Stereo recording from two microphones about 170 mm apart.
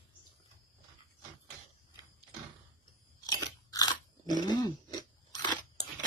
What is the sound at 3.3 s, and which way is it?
Crunch, 20° left (ahead or behind).